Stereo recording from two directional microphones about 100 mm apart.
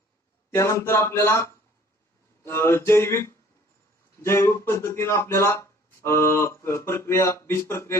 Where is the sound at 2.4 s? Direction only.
25° left (ahead or behind).